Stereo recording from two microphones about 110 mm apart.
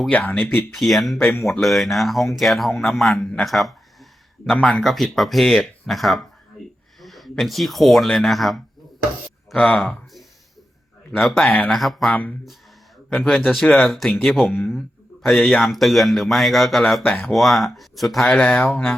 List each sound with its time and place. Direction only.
0.3 s speech: 5° left (ahead or behind)
1.2 s speech: 20° left (ahead or behind)
1.6 s speech: centre (ahead or behind)
11.2 s speech: centre (ahead or behind)
11.4 s speech: 15° left (ahead or behind)
11.7 s speech: centre (ahead or behind)
17.0 s speech: 15° left (ahead or behind)
17.2 s speech: centre (ahead or behind)